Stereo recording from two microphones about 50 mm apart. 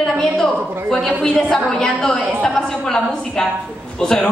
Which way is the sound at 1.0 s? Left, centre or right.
Centre.